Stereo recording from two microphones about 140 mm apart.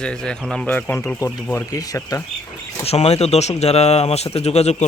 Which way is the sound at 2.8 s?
50° left (ahead or behind).